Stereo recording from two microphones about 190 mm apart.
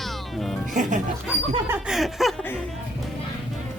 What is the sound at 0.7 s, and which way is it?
Speech, 40° right (ahead or behind).